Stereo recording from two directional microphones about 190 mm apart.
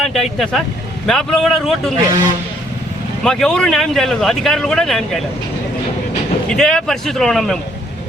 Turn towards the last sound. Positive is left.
turn(degrees=0)  # may be behind; listen again after turning